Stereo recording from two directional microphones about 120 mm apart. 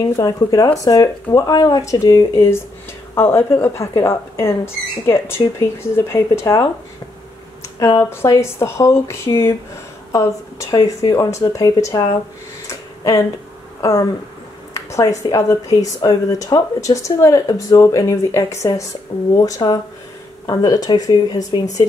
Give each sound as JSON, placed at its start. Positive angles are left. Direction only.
{"t": 0.1, "sound": "speech", "side_deg": 25}
{"t": 7.8, "sound": "speech", "side_deg": 25}
{"t": 12.6, "sound": "tick-tock", "side_deg": 30}
{"t": 13.7, "sound": "speech", "side_deg": 25}
{"t": 19.1, "sound": "speech", "side_deg": 60}
{"t": 19.4, "sound": "speech", "side_deg": 30}